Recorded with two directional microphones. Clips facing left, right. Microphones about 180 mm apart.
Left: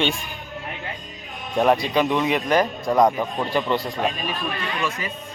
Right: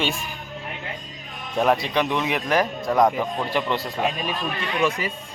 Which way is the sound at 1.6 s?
Centre (ahead or behind).